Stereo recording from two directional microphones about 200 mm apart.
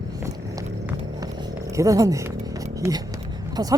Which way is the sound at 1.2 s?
20° right (ahead or behind).